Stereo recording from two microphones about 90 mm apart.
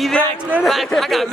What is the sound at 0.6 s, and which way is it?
Speech, centre (ahead or behind).